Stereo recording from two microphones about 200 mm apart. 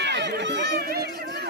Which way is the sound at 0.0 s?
60° right (ahead or behind).